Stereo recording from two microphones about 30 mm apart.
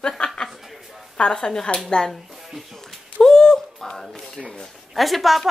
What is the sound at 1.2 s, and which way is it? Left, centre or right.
Speech, left.